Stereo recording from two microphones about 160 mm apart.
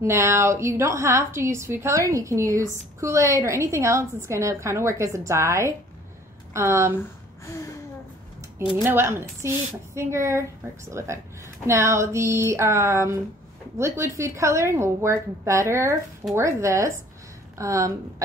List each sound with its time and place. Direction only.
0.0 s a woman's voice: 15° right (ahead or behind)
8.8 s a woman's voice: 15° right (ahead or behind)